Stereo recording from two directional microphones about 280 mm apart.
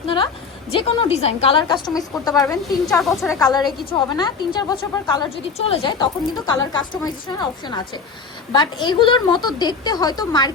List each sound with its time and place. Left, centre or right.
0.7 s a woman's voice: centre
2.8 s a woman's voice: centre
3.3 s a woman's voice: centre